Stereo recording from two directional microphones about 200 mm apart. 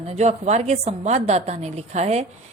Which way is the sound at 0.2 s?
35° right (ahead or behind).